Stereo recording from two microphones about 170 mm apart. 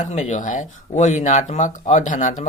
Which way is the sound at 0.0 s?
45° left (ahead or behind).